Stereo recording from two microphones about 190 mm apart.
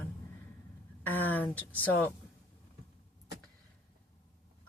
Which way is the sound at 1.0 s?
10° left (ahead or behind).